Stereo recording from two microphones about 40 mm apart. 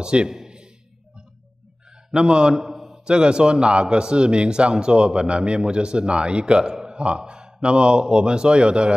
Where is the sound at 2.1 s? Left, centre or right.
Right.